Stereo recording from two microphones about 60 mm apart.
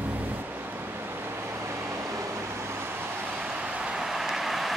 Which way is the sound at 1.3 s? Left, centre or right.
Right.